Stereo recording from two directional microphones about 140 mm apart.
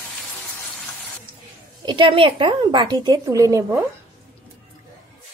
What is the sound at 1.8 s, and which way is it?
A woman's voice, 35° right (ahead or behind).